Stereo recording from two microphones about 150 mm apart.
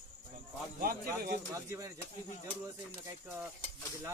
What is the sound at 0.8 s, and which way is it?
Speech, 75° right (ahead or behind).